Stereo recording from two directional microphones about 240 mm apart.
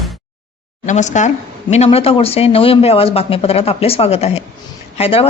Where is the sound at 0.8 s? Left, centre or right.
Left.